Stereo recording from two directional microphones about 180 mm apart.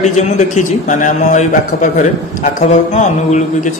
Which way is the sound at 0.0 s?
40° left (ahead or behind).